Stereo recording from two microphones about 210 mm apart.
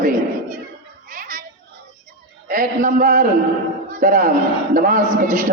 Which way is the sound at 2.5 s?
40° right (ahead or behind).